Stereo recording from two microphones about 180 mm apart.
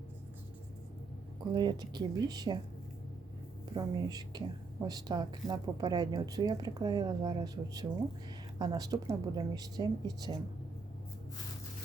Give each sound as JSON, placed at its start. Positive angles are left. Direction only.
{"t": 1.5, "sound": "a woman's voice", "side_deg": -25}
{"t": 3.8, "sound": "a woman's voice", "side_deg": -20}